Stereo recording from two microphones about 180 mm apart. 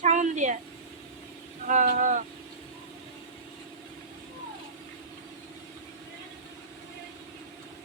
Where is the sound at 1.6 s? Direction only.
45° right (ahead or behind).